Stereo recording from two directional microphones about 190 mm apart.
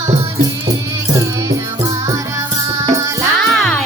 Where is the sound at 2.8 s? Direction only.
15° right (ahead or behind).